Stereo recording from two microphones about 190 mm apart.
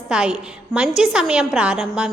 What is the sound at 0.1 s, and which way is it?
A woman's voice, 5° right (ahead or behind).